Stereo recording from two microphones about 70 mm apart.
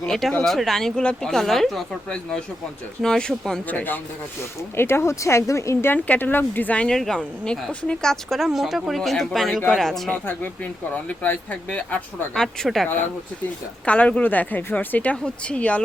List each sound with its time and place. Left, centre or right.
0.0 s speech: centre
3.0 s a woman's voice: centre
3.7 s a woman's voice: left
4.8 s speech: left
5.9 s a woman's voice: left
6.9 s a woman's voice: centre
10.9 s a woman's voice: left
12.6 s speech: centre
13.8 s a woman's voice: centre